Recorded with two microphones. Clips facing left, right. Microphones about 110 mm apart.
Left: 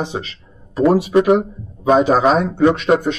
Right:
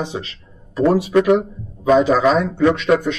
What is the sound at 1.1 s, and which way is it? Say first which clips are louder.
A man's voice: left 1 dB; 30° left (ahead or behind).